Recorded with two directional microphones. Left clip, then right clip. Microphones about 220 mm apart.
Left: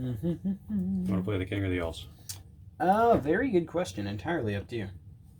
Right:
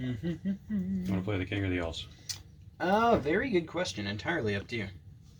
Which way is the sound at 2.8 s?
45° left (ahead or behind).